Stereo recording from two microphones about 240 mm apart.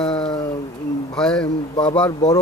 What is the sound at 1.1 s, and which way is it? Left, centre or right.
Speech, centre.